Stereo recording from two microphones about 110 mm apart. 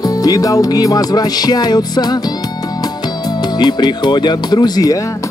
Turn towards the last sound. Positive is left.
turn(degrees=35)  # may be behind; listen again after turning